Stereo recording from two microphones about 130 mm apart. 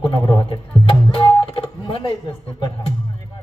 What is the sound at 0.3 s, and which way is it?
Music, 30° left (ahead or behind).